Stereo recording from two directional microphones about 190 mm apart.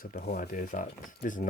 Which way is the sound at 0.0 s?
50° left (ahead or behind).